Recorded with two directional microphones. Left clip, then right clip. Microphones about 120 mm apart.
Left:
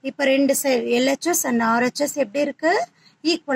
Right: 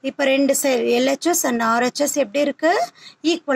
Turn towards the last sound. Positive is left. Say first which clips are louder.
# right 2 dB
turn(degrees=-40)  # may be behind; listen again after turning